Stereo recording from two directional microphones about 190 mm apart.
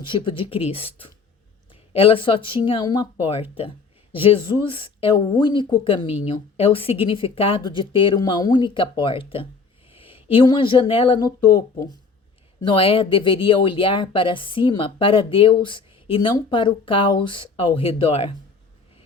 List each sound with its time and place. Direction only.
0.0 s speech: 25° left (ahead or behind)